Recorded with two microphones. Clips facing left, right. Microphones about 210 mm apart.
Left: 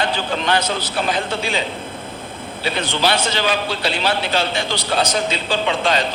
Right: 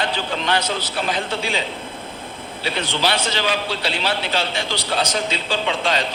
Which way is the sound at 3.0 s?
50° left (ahead or behind).